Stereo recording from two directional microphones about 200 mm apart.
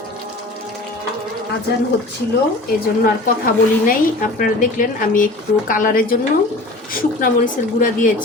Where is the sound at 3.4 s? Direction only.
45° left (ahead or behind).